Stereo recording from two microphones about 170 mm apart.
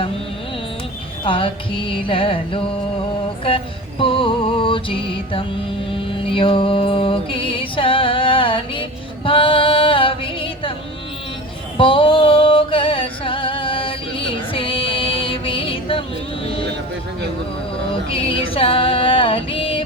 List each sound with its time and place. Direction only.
1.2 s music: 30° left (ahead or behind)
11.8 s music: 30° left (ahead or behind)
17.9 s music: 30° left (ahead or behind)